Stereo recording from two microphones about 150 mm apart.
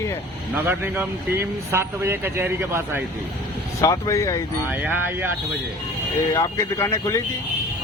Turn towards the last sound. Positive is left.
turn(degrees=20)  # may be behind; listen again after turning